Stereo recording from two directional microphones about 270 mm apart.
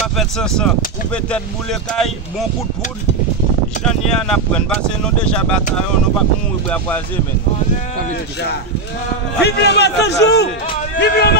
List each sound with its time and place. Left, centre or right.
0.2 s speech: centre
4.1 s speech: centre
9.4 s a man's voice: left